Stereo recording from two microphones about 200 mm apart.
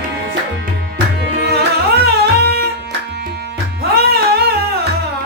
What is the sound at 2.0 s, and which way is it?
Music, 50° right (ahead or behind).